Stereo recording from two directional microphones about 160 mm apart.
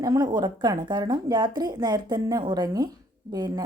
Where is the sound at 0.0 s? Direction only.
25° right (ahead or behind).